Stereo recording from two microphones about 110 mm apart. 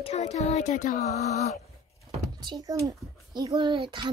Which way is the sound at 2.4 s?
35° right (ahead or behind).